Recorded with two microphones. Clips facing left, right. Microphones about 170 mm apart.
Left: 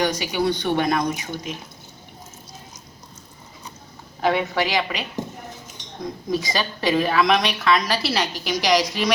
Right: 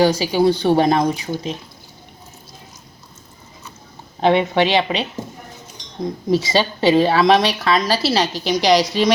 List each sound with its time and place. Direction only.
0.0 s a woman's voice: 30° right (ahead or behind)
4.2 s a woman's voice: 25° right (ahead or behind)